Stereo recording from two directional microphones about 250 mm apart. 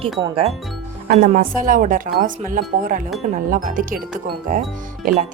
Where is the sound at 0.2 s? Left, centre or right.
Right.